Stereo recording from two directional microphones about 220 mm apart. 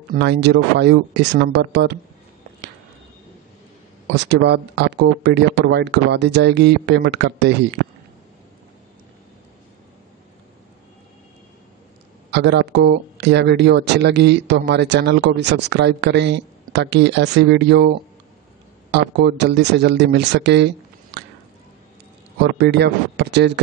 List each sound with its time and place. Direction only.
0.1 s a man's voice: 50° right (ahead or behind)
4.3 s a man's voice: 50° right (ahead or behind)
12.3 s a man's voice: 50° right (ahead or behind)
22.4 s a man's voice: 50° right (ahead or behind)